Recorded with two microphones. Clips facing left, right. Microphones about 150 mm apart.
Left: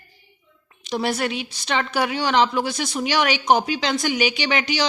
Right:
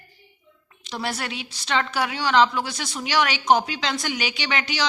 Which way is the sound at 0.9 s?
15° left (ahead or behind).